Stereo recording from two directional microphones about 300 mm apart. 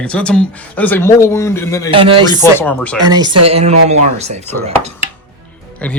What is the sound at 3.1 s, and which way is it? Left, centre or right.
A woman's voice, centre.